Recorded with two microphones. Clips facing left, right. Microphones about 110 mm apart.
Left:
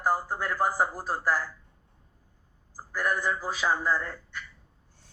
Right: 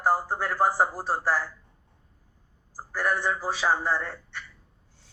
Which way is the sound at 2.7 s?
30° right (ahead or behind).